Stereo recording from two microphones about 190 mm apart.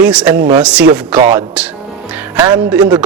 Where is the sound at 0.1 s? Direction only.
5° right (ahead or behind).